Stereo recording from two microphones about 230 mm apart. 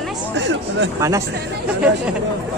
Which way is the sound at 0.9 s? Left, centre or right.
Centre.